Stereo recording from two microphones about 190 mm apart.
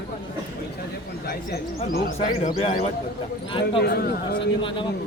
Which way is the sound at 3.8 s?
60° left (ahead or behind).